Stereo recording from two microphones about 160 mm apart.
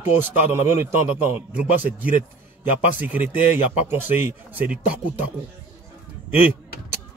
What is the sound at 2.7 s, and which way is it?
Speech, 10° right (ahead or behind).